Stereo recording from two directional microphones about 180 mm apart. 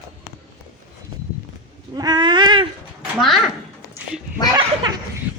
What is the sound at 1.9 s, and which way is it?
Cat, 25° right (ahead or behind).